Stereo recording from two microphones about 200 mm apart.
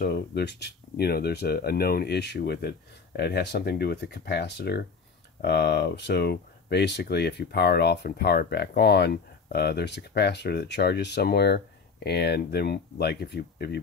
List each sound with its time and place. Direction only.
0.0 s speech: 55° left (ahead or behind)